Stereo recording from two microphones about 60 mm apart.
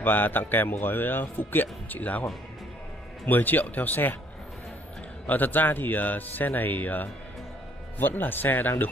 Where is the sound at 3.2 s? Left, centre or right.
Left.